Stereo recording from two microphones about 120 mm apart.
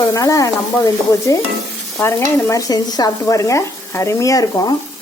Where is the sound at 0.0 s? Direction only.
30° left (ahead or behind).